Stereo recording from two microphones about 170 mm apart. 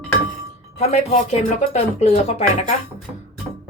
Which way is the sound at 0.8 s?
40° left (ahead or behind).